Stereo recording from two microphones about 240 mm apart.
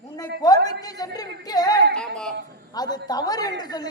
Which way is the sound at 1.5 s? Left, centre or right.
Centre.